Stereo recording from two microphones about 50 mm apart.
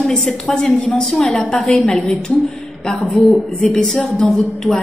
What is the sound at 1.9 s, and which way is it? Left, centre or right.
Speech, centre.